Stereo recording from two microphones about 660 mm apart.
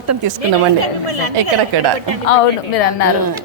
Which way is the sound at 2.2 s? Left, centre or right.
Left.